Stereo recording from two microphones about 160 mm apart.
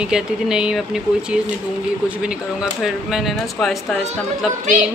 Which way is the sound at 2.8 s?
Centre (ahead or behind).